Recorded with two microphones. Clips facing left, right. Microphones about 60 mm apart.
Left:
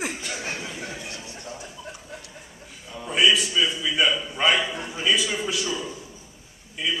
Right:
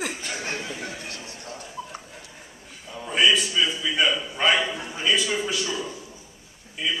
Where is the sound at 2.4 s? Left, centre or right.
Centre.